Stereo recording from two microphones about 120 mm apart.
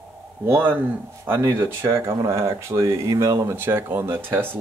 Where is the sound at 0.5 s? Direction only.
15° right (ahead or behind).